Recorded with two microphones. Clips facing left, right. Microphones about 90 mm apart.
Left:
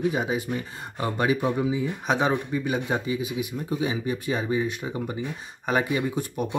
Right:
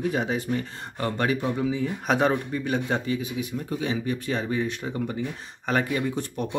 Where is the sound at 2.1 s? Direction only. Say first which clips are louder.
Right 1 dB; 5° left (ahead or behind).